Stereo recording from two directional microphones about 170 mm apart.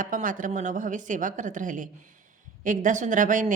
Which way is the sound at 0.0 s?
50° right (ahead or behind).